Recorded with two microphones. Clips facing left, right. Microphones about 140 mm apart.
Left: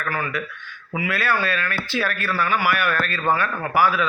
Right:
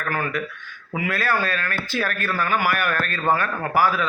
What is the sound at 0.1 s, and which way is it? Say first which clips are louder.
A man's voice: right 2 dB; 45° right (ahead or behind).